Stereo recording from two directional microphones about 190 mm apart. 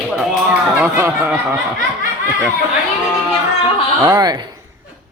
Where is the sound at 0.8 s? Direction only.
10° right (ahead or behind).